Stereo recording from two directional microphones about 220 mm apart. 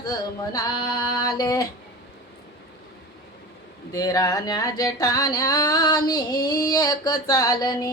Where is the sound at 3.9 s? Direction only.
15° left (ahead or behind).